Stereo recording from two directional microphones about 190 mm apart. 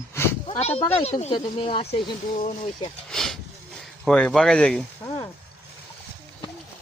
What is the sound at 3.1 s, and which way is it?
Speech, centre (ahead or behind).